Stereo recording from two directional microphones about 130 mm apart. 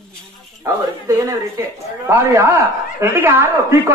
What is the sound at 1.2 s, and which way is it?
Speech, 25° right (ahead or behind).